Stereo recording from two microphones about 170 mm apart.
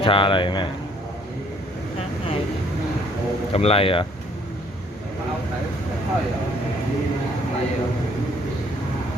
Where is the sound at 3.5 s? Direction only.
35° left (ahead or behind).